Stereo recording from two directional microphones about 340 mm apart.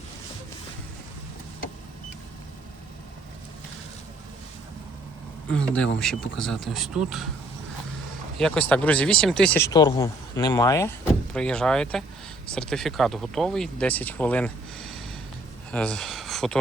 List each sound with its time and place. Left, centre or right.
5.5 s speech: centre
8.4 s speech: centre